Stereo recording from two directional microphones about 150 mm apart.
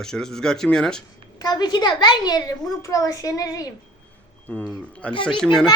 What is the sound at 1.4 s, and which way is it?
A child's voice, 25° left (ahead or behind).